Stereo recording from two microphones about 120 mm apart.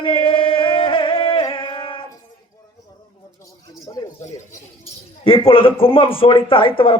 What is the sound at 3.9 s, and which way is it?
Speech, 35° left (ahead or behind).